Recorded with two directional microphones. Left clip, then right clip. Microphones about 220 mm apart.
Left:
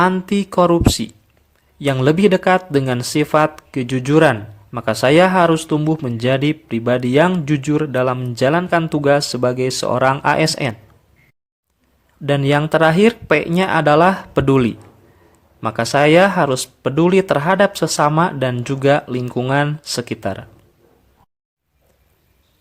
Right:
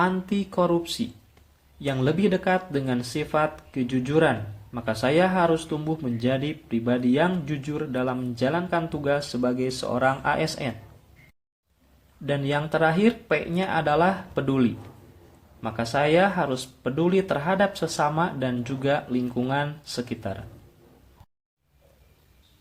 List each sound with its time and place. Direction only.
0.0 s speech: 45° left (ahead or behind)
12.2 s speech: 45° left (ahead or behind)